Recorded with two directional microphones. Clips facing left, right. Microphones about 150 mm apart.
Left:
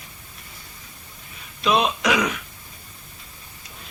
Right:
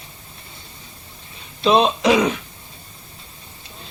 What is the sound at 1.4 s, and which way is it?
Speech, 30° right (ahead or behind).